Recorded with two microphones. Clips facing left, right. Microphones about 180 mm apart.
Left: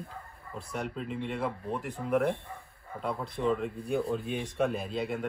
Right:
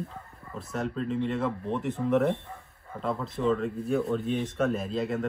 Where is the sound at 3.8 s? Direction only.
Centre (ahead or behind).